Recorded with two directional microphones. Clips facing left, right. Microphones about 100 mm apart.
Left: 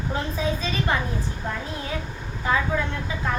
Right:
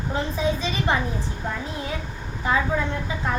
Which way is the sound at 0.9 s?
25° right (ahead or behind).